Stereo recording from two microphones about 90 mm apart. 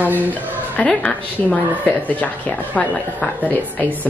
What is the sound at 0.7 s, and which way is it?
Speech, 15° left (ahead or behind).